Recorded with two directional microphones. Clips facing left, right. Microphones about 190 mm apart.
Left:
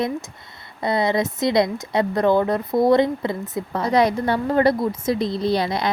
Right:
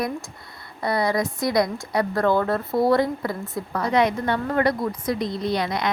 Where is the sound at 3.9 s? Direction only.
35° left (ahead or behind).